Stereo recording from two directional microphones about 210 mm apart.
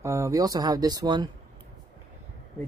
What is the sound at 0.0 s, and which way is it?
Speech, 15° right (ahead or behind).